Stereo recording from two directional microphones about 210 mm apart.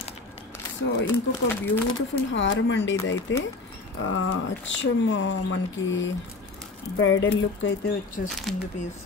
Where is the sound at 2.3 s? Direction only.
65° left (ahead or behind).